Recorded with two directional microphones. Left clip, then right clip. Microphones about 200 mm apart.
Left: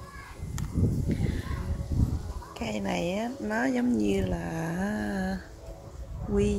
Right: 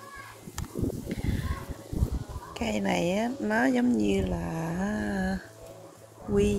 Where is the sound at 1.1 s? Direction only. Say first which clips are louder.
Left 2 dB; centre (ahead or behind).